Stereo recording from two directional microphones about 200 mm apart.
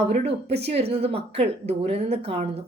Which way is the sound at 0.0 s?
30° right (ahead or behind).